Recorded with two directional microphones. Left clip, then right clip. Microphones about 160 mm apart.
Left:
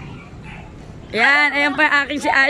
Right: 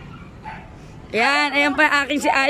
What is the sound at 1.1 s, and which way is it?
A woman's voice, 5° right (ahead or behind).